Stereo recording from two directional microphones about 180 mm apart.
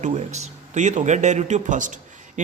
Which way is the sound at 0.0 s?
40° right (ahead or behind).